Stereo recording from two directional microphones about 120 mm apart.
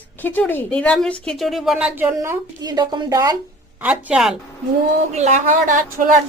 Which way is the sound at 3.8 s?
10° right (ahead or behind).